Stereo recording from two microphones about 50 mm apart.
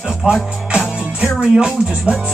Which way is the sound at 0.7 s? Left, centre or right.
Centre.